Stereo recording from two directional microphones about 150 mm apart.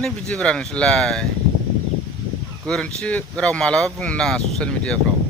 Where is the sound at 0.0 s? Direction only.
5° left (ahead or behind).